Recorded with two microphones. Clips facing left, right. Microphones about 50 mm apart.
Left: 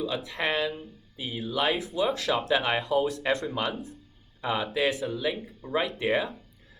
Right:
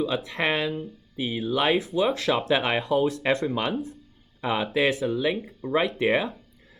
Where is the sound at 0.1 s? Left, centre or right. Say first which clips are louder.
Right 3 dB; right.